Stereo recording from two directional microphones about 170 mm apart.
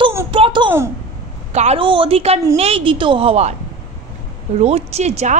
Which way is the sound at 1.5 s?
40° right (ahead or behind).